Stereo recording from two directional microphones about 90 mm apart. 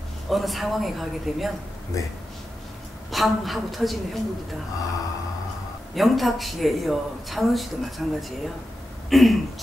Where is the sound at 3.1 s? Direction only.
Centre (ahead or behind).